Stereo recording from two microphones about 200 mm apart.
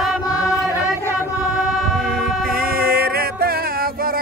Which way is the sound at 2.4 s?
50° right (ahead or behind).